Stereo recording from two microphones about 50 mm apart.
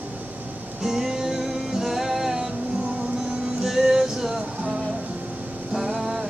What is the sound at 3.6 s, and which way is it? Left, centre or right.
Music, centre.